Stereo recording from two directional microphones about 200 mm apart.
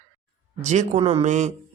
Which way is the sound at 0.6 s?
35° right (ahead or behind).